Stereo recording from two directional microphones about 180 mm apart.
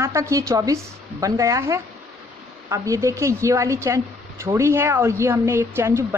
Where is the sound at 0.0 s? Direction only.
15° right (ahead or behind).